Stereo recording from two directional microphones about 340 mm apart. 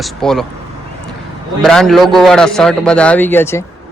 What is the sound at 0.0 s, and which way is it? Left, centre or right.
Speech, centre.